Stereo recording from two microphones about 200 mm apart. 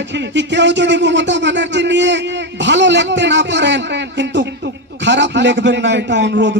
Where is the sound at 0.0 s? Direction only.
60° right (ahead or behind).